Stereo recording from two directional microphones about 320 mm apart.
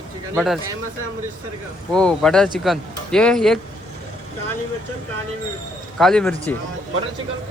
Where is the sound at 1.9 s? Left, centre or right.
Centre.